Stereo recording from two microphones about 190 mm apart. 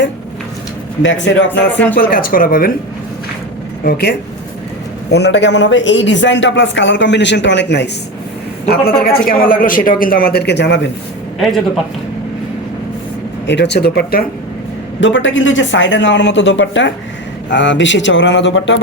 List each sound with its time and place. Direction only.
1.0 s a man's voice: 75° left (ahead or behind)
2.0 s a man's voice: 50° left (ahead or behind)
3.8 s speech: 55° left (ahead or behind)
5.1 s a man's voice: 65° left (ahead or behind)
8.6 s a man's voice: 55° left (ahead or behind)
11.3 s speech: centre (ahead or behind)
13.5 s speech: 65° left (ahead or behind)
15.0 s a man's voice: 75° left (ahead or behind)